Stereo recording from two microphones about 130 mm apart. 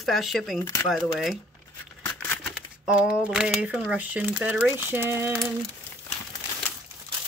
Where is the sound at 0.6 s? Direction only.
25° left (ahead or behind).